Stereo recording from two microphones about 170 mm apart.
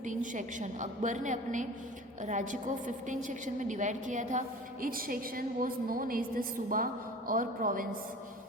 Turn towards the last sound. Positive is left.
turn(degrees=-55)  # may be behind; listen again after turning